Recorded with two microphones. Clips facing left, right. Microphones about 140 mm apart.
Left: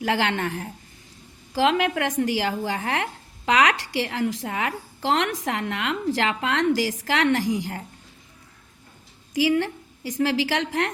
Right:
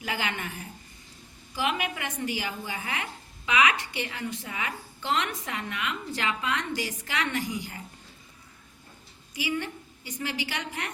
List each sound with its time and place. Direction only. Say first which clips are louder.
0.0 s a woman's voice: left 9 dB; 85° left
9.3 s a woman's voice: left 10 dB; 90° left